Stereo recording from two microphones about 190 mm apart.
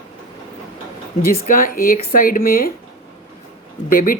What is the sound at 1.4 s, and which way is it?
Speech, 45° left (ahead or behind).